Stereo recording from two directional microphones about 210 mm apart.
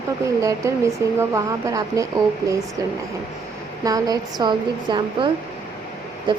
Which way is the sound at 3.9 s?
15° right (ahead or behind).